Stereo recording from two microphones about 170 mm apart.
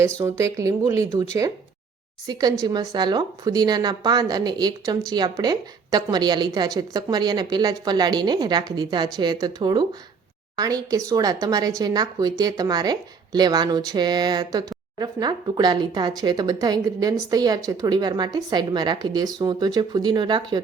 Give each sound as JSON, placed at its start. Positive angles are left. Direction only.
{"t": 0.2, "sound": "speech", "side_deg": -15}